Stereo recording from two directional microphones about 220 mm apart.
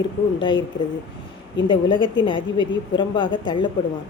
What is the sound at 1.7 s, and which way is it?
A woman's voice, 20° left (ahead or behind).